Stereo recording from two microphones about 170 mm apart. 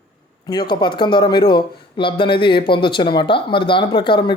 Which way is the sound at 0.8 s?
30° left (ahead or behind).